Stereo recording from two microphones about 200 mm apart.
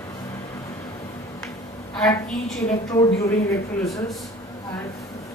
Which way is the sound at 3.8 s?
Centre (ahead or behind).